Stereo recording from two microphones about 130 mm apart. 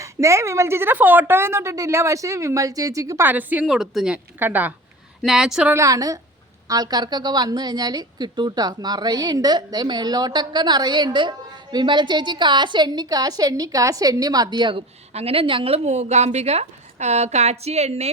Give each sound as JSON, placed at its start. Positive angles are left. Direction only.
{"t": 0.0, "sound": "a woman's voice", "side_deg": -25}
{"t": 3.2, "sound": "a woman's voice", "side_deg": -15}
{"t": 5.2, "sound": "speech", "side_deg": -5}
{"t": 5.7, "sound": "a woman's voice", "side_deg": -25}
{"t": 15.1, "sound": "a woman's voice", "side_deg": -50}